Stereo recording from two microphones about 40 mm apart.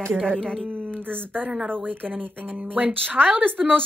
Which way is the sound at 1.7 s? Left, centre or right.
Right.